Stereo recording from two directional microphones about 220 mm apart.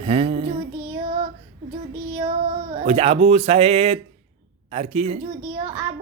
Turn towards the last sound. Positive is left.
turn(degrees=-20)  # may be behind; listen again after turning